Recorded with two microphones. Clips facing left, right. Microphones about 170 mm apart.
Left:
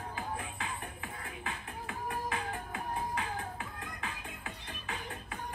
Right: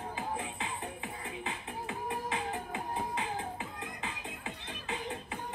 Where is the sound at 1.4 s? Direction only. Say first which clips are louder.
Right 1 dB; 20° right (ahead or behind).